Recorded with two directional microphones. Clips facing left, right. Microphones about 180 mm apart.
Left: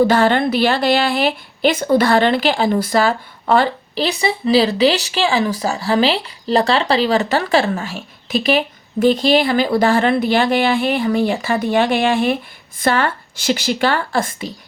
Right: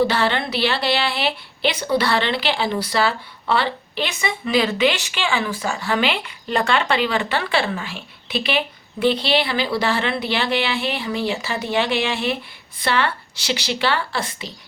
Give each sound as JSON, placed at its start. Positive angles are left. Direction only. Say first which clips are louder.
{"t": 0.0, "sound": "a woman's voice", "louder": "left 6 dB", "side_deg": 45}